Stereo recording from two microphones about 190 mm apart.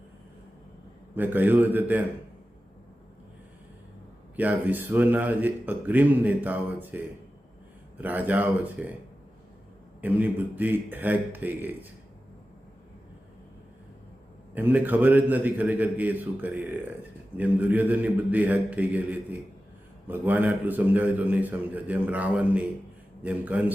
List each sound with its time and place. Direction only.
1.1 s speech: 10° right (ahead or behind)
4.4 s speech: 10° right (ahead or behind)
10.0 s speech: 10° right (ahead or behind)
14.5 s speech: 10° right (ahead or behind)